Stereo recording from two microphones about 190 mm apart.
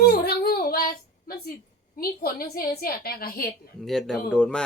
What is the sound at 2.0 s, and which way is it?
A woman's voice, 50° left (ahead or behind).